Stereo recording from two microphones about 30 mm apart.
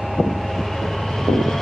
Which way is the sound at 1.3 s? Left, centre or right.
Centre.